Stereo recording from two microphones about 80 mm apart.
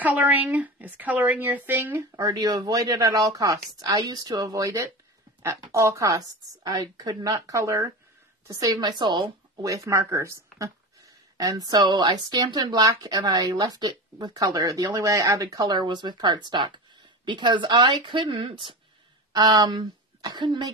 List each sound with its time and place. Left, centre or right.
0.0 s a woman's voice: right
2.1 s speech: right
8.7 s speech: right
9.6 s speech: right
11.3 s speech: right
11.7 s speech: right
19.3 s a woman's voice: right